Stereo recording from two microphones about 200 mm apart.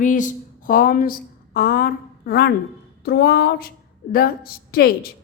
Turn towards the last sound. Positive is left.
turn(degrees=50)  # may be behind; listen again after turning